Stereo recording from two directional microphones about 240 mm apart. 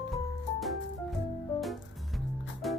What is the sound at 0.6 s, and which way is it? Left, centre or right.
Music, centre.